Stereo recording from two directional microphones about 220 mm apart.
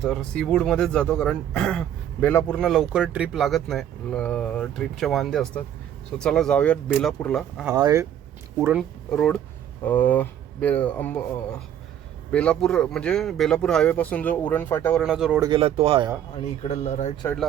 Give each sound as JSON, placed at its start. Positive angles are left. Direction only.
{"t": 0.0, "sound": "speech", "side_deg": 0}
{"t": 7.8, "sound": "speech", "side_deg": -15}
{"t": 8.6, "sound": "speech", "side_deg": 0}
{"t": 12.3, "sound": "speech", "side_deg": 5}
{"t": 15.0, "sound": "speech", "side_deg": -5}
{"t": 15.4, "sound": "speech", "side_deg": -20}
{"t": 16.4, "sound": "speech", "side_deg": 30}